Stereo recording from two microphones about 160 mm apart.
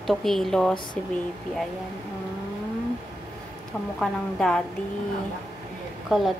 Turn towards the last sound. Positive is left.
turn(degrees=-5)  # may be behind; listen again after turning